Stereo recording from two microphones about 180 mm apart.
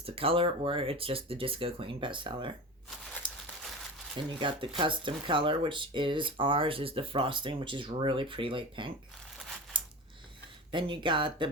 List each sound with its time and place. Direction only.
0.0 s speech: 30° right (ahead or behind)
3.2 s crumpling: 25° right (ahead or behind)
4.3 s speech: 25° right (ahead or behind)
10.7 s speech: 25° right (ahead or behind)